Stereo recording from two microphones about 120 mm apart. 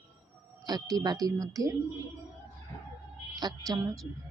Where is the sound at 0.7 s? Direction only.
35° right (ahead or behind).